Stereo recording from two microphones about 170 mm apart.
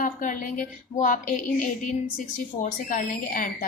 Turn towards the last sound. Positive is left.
turn(degrees=50)  # may be behind; listen again after turning